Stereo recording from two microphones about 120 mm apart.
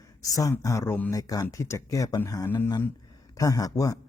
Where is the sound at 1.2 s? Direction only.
30° left (ahead or behind).